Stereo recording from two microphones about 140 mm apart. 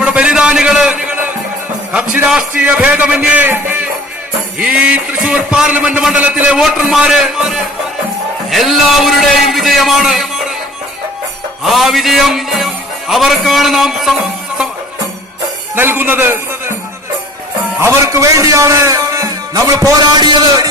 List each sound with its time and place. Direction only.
0.0 s a sound: 10° right (ahead or behind)
2.6 s music: 10° right (ahead or behind)
4.5 s a man's voice: 5° right (ahead or behind)
11.6 s a man's voice: centre (ahead or behind)
15.7 s a man's voice: 15° right (ahead or behind)
17.7 s a man's voice: 20° right (ahead or behind)